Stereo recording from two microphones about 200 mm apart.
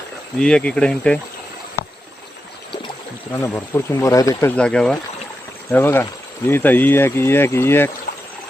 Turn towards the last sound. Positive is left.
turn(degrees=10)  # may be behind; listen again after turning